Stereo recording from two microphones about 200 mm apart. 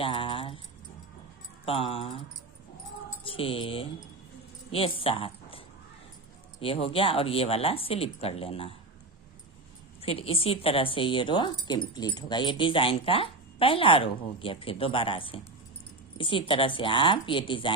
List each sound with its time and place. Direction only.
0.0 s keys jangling: 25° left (ahead or behind)
1.6 s speech: 30° left (ahead or behind)
3.2 s speech: 25° left (ahead or behind)
10.0 s speech: 30° left (ahead or behind)